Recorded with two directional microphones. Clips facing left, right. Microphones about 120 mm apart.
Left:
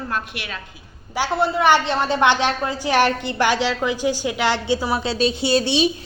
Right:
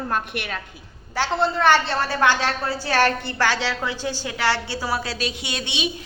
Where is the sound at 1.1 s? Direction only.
10° left (ahead or behind).